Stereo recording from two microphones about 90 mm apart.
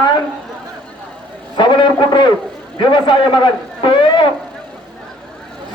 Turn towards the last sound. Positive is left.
turn(degrees=65)  # may be behind; listen again after turning